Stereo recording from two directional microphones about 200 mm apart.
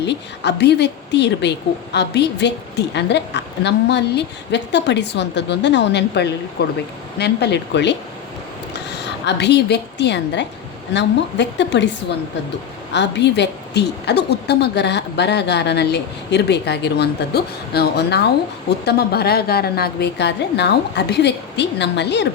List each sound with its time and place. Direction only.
0.0 s a woman's voice: 60° left (ahead or behind)
12.9 s a woman's voice: 60° left (ahead or behind)